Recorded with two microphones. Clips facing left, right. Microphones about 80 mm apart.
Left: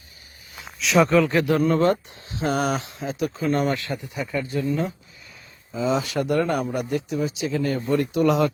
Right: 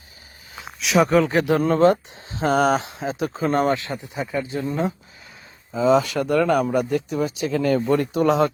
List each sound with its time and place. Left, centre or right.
0.8 s speech: centre
1.1 s speech: right
1.5 s speech: right
2.4 s speech: right
2.7 s speech: right
3.8 s speech: right
5.7 s speech: right